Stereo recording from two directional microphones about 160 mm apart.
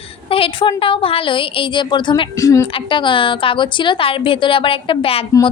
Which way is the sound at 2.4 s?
20° left (ahead or behind).